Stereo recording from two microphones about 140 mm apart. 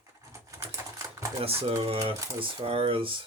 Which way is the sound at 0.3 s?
20° right (ahead or behind).